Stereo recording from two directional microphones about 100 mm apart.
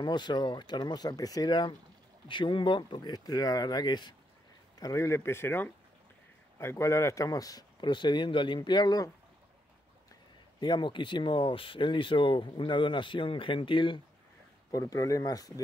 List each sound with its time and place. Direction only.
0.0 s speech: 50° left (ahead or behind)
2.2 s speech: 55° left (ahead or behind)
4.7 s speech: 35° left (ahead or behind); by 8.5 s 55° left (ahead or behind)
8.5 s speech: 45° left (ahead or behind)
10.6 s speech: 50° left (ahead or behind)
14.7 s speech: 35° left (ahead or behind)